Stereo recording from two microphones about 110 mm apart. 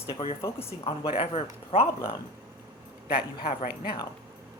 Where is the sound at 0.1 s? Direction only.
65° left (ahead or behind).